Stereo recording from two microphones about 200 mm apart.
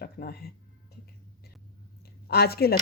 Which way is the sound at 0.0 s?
50° left (ahead or behind).